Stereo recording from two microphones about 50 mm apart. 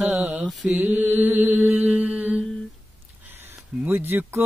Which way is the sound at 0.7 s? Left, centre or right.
Right.